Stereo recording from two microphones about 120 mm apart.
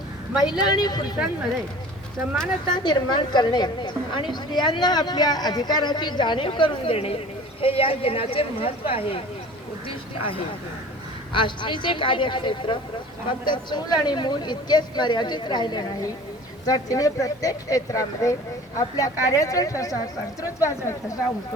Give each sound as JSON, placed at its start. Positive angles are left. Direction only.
{"t": 0.6, "sound": "a woman's voice", "side_deg": 35}
{"t": 2.3, "sound": "speech", "side_deg": 5}
{"t": 2.7, "sound": "a woman's voice", "side_deg": 40}
{"t": 11.3, "sound": "a woman's voice", "side_deg": 45}